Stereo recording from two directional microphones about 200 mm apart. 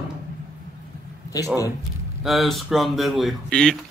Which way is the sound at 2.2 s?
Centre (ahead or behind).